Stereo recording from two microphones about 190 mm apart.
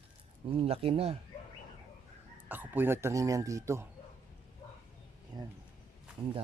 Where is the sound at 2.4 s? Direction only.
10° right (ahead or behind).